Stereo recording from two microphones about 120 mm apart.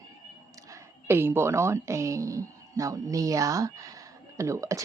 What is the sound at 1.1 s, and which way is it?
Speech, 20° right (ahead or behind).